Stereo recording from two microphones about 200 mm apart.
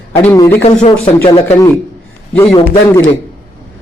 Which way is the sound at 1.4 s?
10° left (ahead or behind).